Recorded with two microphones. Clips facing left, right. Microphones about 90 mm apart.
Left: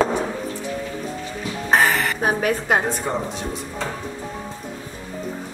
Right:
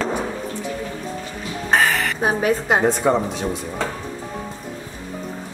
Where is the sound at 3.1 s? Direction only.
90° right.